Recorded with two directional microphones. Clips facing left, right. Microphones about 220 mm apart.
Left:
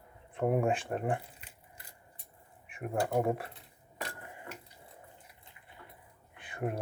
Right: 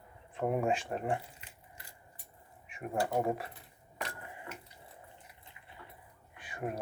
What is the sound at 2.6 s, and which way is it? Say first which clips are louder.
Speech: left 1 dB; 55° left (ahead or behind).